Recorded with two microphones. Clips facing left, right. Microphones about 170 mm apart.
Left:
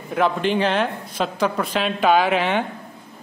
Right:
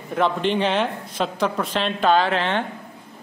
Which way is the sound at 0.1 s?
5° left (ahead or behind).